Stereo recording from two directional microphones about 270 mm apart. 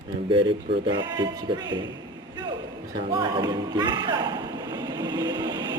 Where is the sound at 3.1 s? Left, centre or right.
Centre.